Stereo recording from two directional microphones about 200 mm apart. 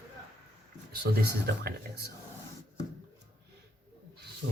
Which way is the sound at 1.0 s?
50° right (ahead or behind).